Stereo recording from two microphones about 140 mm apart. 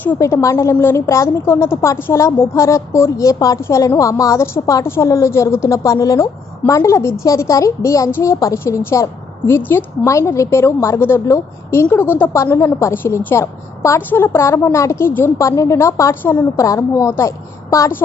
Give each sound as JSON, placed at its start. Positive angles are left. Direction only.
{"t": 0.0, "sound": "a woman's voice", "side_deg": 15}